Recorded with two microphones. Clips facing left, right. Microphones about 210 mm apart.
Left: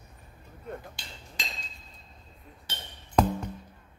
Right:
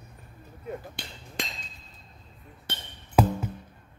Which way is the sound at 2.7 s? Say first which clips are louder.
Right 4 dB; 60° right (ahead or behind).